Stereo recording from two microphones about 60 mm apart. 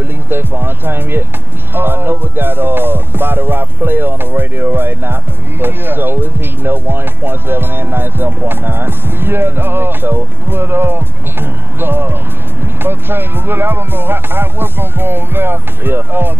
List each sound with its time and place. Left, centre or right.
0.3 s speech: right